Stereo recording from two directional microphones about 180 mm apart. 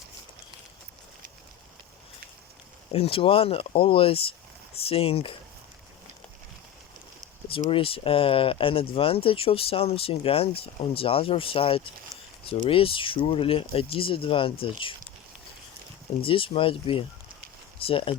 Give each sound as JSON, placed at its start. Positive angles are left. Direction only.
{"t": 2.9, "sound": "speech", "side_deg": 30}
{"t": 7.5, "sound": "speech", "side_deg": 30}
{"t": 16.2, "sound": "speech", "side_deg": 30}